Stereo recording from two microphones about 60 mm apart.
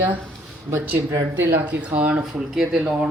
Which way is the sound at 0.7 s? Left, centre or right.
Right.